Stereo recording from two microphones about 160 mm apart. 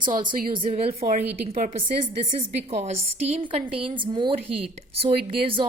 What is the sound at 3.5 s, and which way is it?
Speech, 35° right (ahead or behind).